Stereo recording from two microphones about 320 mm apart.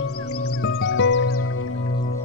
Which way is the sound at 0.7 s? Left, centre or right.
Left.